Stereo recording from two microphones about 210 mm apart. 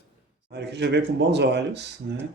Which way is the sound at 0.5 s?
55° right (ahead or behind).